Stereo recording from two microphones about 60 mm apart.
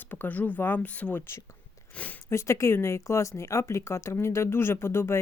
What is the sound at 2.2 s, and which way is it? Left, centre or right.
Speech, left.